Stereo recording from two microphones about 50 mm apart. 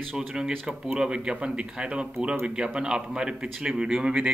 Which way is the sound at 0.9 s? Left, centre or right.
Centre.